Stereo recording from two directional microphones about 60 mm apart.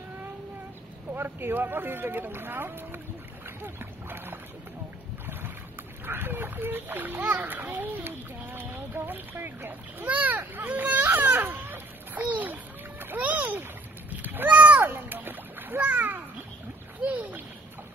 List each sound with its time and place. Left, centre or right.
1.1 s speech: right
3.4 s boat: right
6.0 s a child's voice: right
11.5 s splash: right
14.1 s a sound: right
14.9 s splash: right
17.0 s a sound: right